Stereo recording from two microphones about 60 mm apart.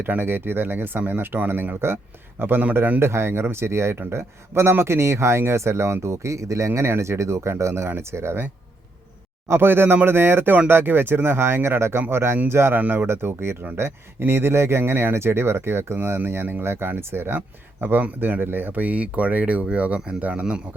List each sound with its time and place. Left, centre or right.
0.0 s speech: right
3.0 s speech: right
9.5 s speech: right
12.8 s speech: right
13.1 s speech: right; by 20.6 s centre